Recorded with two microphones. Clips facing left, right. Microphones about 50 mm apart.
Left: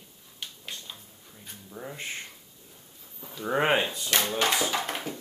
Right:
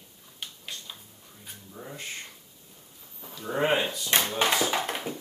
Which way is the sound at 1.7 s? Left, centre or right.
Centre.